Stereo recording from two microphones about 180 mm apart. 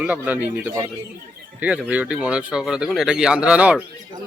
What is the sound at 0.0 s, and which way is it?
Speech, 10° right (ahead or behind).